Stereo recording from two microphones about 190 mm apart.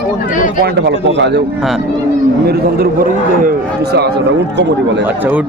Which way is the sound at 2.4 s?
55° right (ahead or behind).